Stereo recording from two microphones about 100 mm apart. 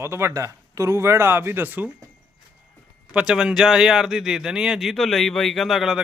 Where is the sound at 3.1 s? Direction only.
10° right (ahead or behind).